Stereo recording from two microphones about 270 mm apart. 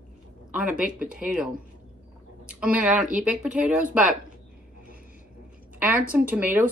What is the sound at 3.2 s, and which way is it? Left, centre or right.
Speech, centre.